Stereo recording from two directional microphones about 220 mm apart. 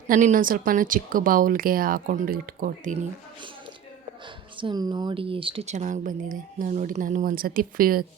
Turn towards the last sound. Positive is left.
turn(degrees=-40)  # may be behind; listen again after turning